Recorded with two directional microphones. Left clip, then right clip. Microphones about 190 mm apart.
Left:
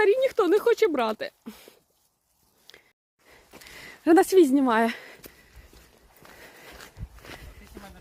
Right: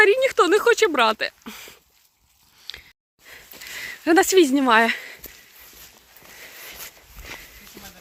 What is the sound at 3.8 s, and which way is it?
Speech, 20° left (ahead or behind).